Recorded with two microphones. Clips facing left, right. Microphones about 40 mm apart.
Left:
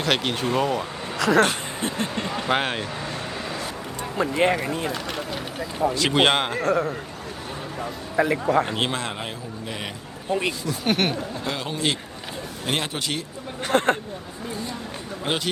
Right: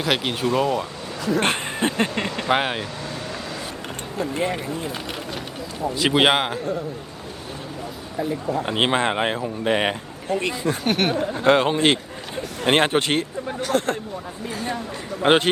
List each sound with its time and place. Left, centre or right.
0.0 s speech: centre
1.2 s speech: left
1.5 s speech: right
2.5 s speech: centre
4.2 s speech: left
5.9 s speech: centre
6.6 s speech: left
8.1 s speech: left
8.6 s speech: right
10.8 s speech: centre
11.1 s speech: right
13.6 s speech: left
15.2 s speech: right